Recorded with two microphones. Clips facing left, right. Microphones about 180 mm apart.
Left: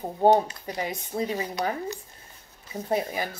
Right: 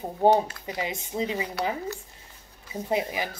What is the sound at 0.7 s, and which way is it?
Speech, 10° right (ahead or behind).